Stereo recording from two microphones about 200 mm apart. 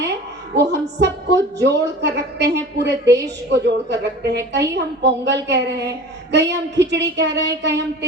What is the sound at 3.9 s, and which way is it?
A woman's voice, 60° right (ahead or behind).